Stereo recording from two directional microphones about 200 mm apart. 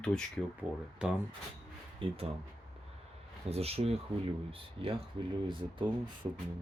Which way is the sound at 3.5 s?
30° right (ahead or behind).